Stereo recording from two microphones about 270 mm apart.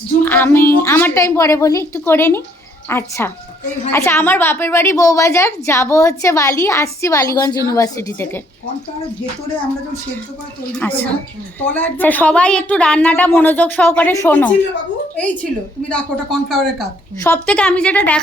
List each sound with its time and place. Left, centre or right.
0.3 s a woman's voice: centre
10.7 s a woman's voice: centre
15.9 s a woman's voice: centre